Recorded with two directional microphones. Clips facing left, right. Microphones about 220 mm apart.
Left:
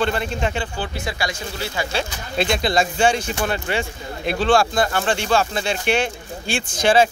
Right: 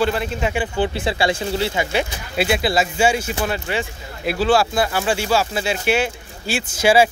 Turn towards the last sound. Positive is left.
turn(degrees=-10)  # may be behind; listen again after turning